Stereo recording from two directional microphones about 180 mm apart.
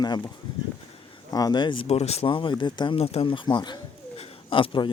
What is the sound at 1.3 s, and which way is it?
Speech, 20° left (ahead or behind).